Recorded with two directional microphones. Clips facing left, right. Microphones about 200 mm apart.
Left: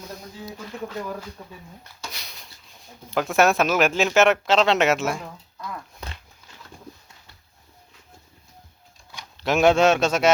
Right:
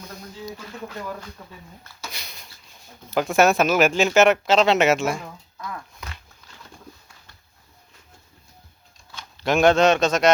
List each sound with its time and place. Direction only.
1.4 s speech: 15° left (ahead or behind)
2.0 s a sound: centre (ahead or behind)
3.2 s speech: centre (ahead or behind)
9.4 s speech: 5° left (ahead or behind)